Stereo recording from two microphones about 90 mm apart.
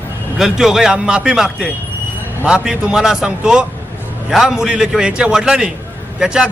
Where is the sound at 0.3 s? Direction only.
5° right (ahead or behind).